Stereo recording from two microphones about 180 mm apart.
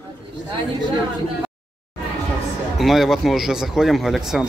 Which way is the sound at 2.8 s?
Centre (ahead or behind).